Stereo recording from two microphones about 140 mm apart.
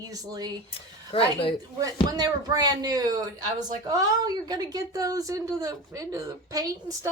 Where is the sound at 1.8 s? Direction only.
25° right (ahead or behind).